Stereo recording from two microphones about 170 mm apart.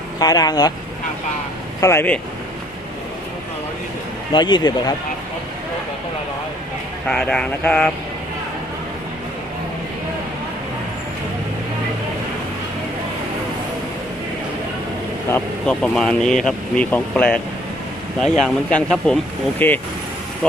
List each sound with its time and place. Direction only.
0.2 s speech: 25° left (ahead or behind)
1.8 s speech: 15° left (ahead or behind)
4.3 s speech: 25° left (ahead or behind)
7.1 s speech: 5° left (ahead or behind)
15.3 s speech: 5° left (ahead or behind)